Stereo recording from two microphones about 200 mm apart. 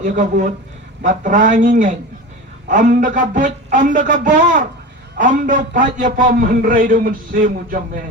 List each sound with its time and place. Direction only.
0.0 s a man's voice: 40° right (ahead or behind)